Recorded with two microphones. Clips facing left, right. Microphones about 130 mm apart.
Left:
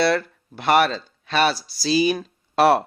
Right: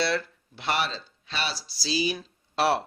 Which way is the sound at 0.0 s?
55° left (ahead or behind).